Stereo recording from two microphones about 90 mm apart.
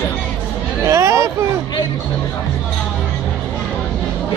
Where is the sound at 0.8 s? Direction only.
35° right (ahead or behind).